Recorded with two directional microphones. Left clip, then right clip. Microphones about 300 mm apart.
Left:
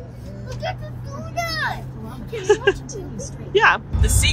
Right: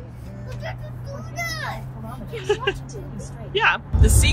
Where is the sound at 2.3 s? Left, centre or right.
Left.